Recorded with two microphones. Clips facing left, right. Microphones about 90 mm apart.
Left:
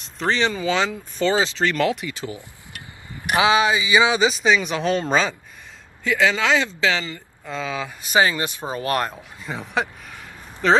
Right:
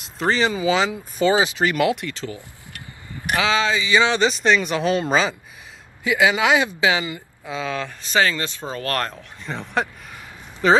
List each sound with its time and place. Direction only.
0.0 s speech: 5° right (ahead or behind)
2.1 s speech: 20° left (ahead or behind); by 5.3 s 5° right (ahead or behind)
6.0 s speech: 15° right (ahead or behind)
7.4 s speech: centre (ahead or behind)